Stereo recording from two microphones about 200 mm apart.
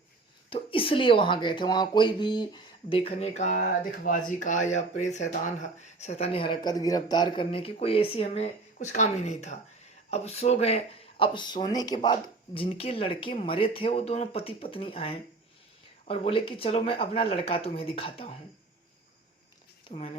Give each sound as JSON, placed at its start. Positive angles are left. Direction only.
{"t": 0.5, "sound": "speech", "side_deg": 25}
{"t": 3.1, "sound": "speech", "side_deg": 30}
{"t": 19.9, "sound": "speech", "side_deg": 30}